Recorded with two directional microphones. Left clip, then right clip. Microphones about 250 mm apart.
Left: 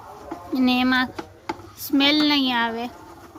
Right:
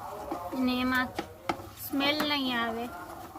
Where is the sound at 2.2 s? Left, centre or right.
Left.